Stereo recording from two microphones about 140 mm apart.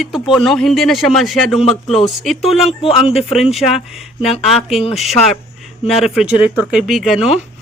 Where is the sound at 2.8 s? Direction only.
45° left (ahead or behind).